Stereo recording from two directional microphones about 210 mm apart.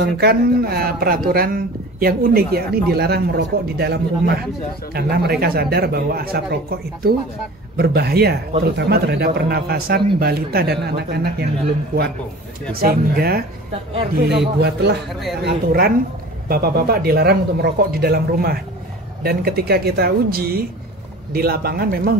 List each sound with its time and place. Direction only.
0.0 s speech: 45° right (ahead or behind)
12.7 s speech: 45° right (ahead or behind)